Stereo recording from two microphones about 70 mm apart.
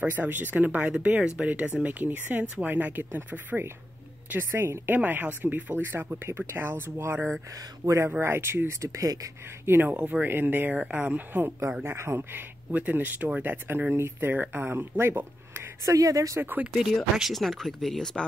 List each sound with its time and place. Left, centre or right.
0.0 s speech: right
4.9 s speech: right
7.8 s speech: right
8.2 s speech: right
8.6 s speech: right
9.7 s speech: right
11.8 s speech: right
15.8 s speech: right
16.3 s speech: right
16.7 s speech: centre